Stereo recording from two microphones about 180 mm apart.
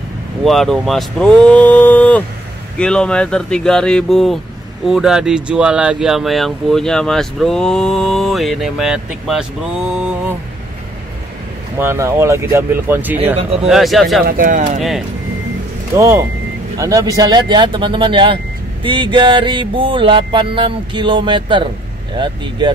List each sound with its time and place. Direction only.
0.4 s speech: centre (ahead or behind)
11.8 s speech: 15° right (ahead or behind)
14.2 s speech: 50° right (ahead or behind)
14.8 s speech: centre (ahead or behind)
15.9 s speech: 15° right (ahead or behind)
16.7 s mantra: 20° right (ahead or behind)